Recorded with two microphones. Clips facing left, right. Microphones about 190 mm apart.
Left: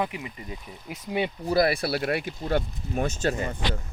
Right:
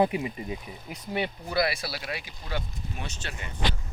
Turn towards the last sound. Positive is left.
turn(degrees=40)  # may be behind; listen again after turning